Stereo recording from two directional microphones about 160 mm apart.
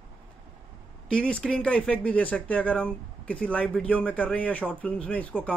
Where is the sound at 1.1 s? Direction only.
5° left (ahead or behind).